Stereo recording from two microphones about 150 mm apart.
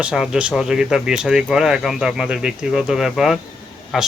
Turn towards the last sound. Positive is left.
turn(degrees=0)  # may be behind; listen again after turning